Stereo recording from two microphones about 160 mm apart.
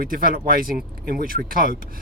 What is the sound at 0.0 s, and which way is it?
Speech, 65° right (ahead or behind).